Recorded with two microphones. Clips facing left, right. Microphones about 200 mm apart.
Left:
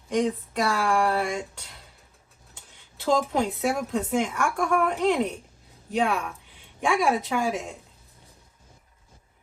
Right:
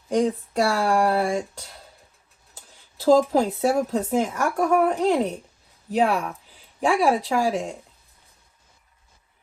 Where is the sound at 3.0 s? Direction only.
35° right (ahead or behind).